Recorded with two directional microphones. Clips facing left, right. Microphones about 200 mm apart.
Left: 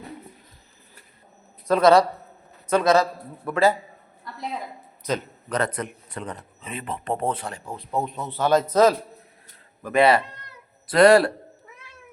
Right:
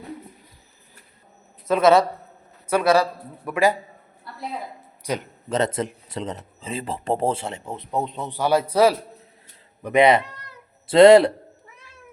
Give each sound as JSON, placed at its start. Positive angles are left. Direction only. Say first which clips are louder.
{"t": 1.6, "sound": "a man's voice", "louder": "even", "side_deg": -5}
{"t": 5.0, "sound": "a man's voice", "louder": "left 1 dB", "side_deg": -15}
{"t": 5.5, "sound": "speech", "louder": "right 3 dB", "side_deg": -25}